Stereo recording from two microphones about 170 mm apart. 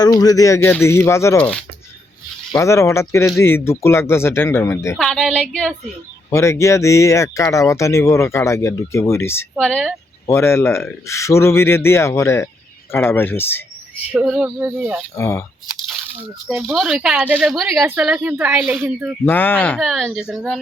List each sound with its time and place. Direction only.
0.0 s speech: 20° left (ahead or behind)
2.5 s speech: 15° left (ahead or behind)
4.9 s speech: centre (ahead or behind)
6.3 s speech: 15° left (ahead or behind)
10.2 s speech: 15° left (ahead or behind)
14.1 s speech: 5° right (ahead or behind)
15.1 s speech: 15° left (ahead or behind)
16.5 s speech: 5° right (ahead or behind)
19.2 s speech: 10° left (ahead or behind)